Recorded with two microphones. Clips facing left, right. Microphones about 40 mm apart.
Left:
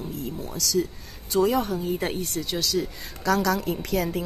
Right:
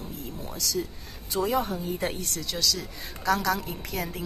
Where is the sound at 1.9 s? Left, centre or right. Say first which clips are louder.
Left 3 dB; centre.